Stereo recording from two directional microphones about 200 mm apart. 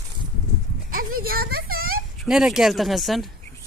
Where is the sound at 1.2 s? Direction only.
50° right (ahead or behind).